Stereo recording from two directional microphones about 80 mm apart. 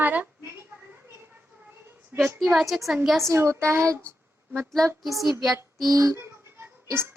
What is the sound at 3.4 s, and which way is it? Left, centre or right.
Speech, right.